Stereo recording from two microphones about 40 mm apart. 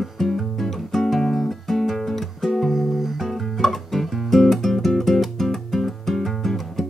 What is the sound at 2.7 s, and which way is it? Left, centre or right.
Music, centre.